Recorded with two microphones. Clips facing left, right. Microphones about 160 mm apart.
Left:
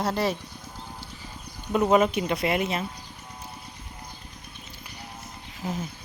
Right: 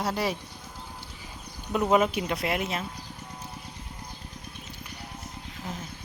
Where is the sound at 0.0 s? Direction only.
10° right (ahead or behind).